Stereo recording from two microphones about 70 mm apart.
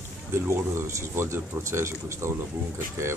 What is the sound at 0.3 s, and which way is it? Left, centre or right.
Speech, right.